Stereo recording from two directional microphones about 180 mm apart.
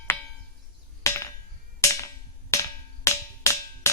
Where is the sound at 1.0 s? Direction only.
15° left (ahead or behind).